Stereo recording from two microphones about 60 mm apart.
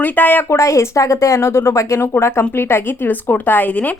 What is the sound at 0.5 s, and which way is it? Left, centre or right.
A woman's voice, left.